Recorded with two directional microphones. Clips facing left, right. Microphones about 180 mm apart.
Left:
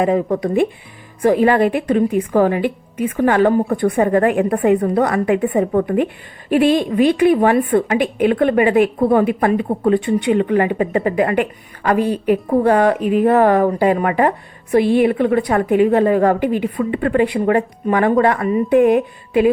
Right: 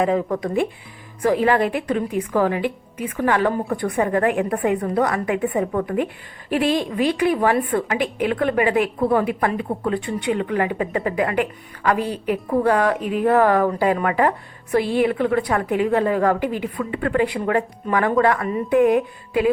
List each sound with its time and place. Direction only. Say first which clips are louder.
0.0 s a woman's voice: left 4 dB; 20° left (ahead or behind)